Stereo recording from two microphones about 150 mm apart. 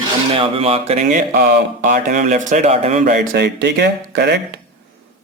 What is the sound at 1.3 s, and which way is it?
Speech, 90° right.